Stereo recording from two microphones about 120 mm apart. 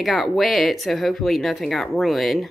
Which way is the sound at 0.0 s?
Centre (ahead or behind).